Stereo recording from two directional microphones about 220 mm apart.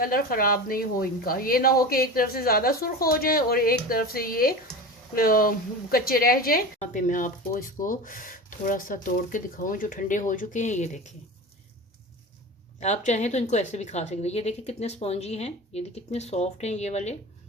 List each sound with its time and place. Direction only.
0.0 s a woman's voice: 40° left (ahead or behind)
12.8 s a woman's voice: 30° left (ahead or behind)